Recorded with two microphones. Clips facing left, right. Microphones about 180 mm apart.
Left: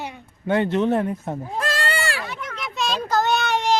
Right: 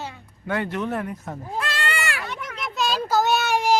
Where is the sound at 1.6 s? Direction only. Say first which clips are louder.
Left 3 dB; 40° left (ahead or behind).